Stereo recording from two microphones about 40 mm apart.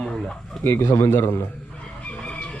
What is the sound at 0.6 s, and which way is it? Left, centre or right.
Speech, left.